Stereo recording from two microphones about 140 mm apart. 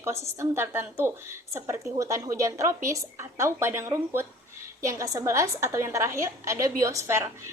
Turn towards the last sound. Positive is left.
turn(degrees=-20)  # may be behind; listen again after turning